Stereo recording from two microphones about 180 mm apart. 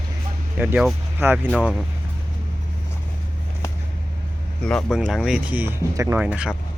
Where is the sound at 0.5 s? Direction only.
10° right (ahead or behind).